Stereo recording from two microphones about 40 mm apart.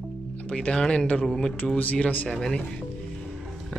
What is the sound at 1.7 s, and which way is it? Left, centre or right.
Speech, left.